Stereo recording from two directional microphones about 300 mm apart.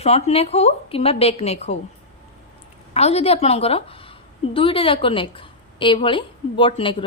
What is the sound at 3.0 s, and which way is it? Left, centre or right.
A woman's voice, left.